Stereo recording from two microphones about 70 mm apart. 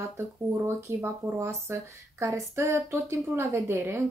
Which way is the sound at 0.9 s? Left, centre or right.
Right.